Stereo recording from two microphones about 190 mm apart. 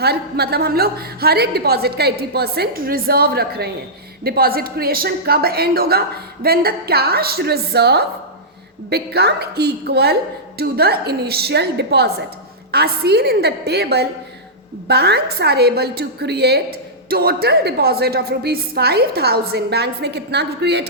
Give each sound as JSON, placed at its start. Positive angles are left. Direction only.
{"t": 0.0, "sound": "a woman's voice", "side_deg": -55}